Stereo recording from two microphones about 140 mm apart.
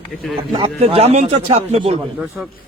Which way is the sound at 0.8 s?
45° right (ahead or behind).